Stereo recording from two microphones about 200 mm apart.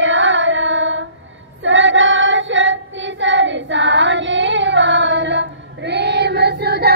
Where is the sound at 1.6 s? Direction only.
70° right (ahead or behind).